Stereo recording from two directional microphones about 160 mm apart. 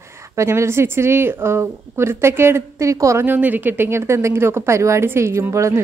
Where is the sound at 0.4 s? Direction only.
15° right (ahead or behind).